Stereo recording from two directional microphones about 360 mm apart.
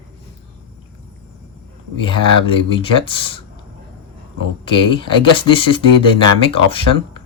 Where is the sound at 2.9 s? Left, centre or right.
Centre.